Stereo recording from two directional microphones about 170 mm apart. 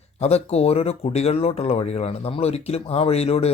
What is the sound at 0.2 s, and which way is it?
Speech, 40° left (ahead or behind).